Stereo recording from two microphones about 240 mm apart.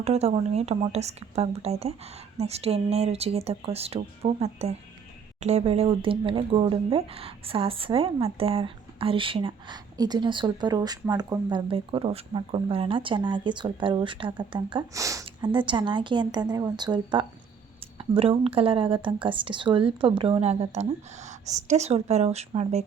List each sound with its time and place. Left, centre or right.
0.0 s speech: right